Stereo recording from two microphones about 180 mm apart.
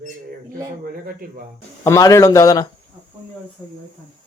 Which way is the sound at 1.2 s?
50° right (ahead or behind).